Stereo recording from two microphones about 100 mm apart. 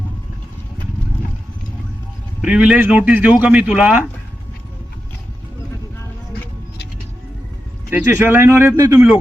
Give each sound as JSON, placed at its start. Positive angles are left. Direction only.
{"t": 2.4, "sound": "a man's voice", "side_deg": -10}
{"t": 7.9, "sound": "speech", "side_deg": -20}